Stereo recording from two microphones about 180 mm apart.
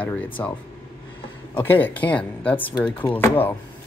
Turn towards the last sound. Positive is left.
turn(degrees=10)  # may be behind; listen again after turning